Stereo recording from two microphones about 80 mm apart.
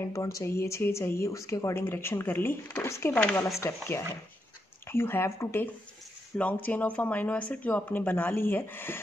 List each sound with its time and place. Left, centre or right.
0.1 s speech: left
3.1 s speech: left
3.6 s speech: left